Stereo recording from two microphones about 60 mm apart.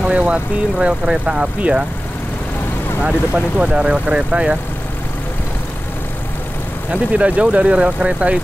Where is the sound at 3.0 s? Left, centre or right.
Centre.